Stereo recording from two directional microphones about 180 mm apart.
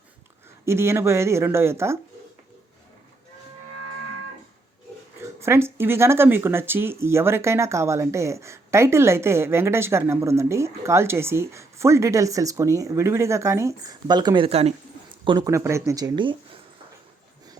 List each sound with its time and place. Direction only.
0.6 s speech: 15° right (ahead or behind)
5.2 s speech: 15° right (ahead or behind)